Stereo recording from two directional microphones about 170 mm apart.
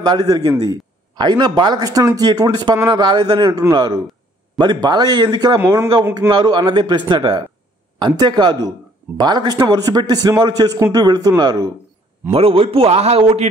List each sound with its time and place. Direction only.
0.0 s a man's voice: 25° right (ahead or behind)
12.3 s a man's voice: 35° right (ahead or behind)